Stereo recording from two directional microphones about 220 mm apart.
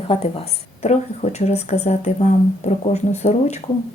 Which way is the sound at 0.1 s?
25° left (ahead or behind).